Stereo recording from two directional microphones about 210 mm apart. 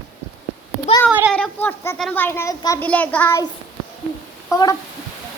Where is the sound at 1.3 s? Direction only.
5° left (ahead or behind).